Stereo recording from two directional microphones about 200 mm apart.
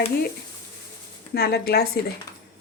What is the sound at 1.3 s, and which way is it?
Speech, 50° left (ahead or behind).